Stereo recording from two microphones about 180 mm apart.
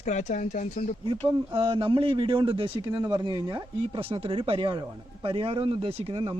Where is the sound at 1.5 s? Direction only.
30° right (ahead or behind).